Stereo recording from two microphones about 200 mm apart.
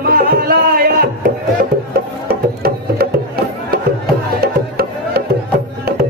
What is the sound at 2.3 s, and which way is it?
Music, 50° right (ahead or behind).